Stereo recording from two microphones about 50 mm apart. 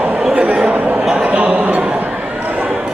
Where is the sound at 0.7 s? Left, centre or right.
Right.